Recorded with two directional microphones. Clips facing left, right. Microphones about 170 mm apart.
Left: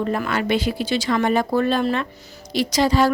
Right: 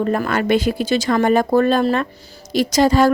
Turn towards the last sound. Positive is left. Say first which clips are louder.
# right 4 dB
turn(degrees=-45)  # may be behind; listen again after turning